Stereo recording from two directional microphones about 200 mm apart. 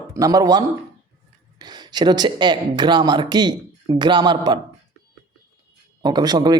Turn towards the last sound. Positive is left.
turn(degrees=-20)  # may be behind; listen again after turning